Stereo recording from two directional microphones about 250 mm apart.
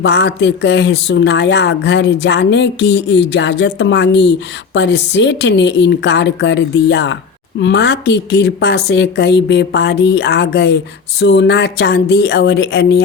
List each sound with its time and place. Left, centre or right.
0.0 s speech: left